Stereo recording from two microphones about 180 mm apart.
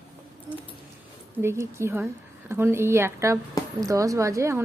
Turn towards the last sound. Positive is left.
turn(degrees=-15)  # may be behind; listen again after turning